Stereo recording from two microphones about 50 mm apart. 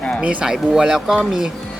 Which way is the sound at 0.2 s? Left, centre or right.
Right.